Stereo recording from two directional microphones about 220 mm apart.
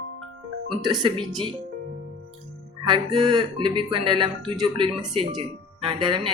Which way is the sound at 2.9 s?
20° right (ahead or behind).